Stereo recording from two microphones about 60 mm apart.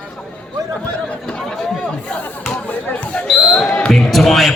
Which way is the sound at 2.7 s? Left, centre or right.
Left.